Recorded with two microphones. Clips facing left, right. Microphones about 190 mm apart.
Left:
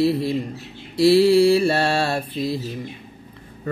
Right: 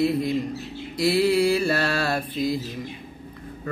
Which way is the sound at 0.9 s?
30° left (ahead or behind).